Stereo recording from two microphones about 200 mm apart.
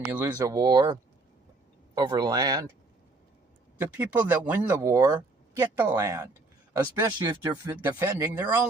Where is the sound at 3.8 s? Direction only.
10° right (ahead or behind).